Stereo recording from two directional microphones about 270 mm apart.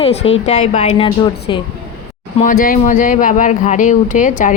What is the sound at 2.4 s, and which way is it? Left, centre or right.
Speech, left.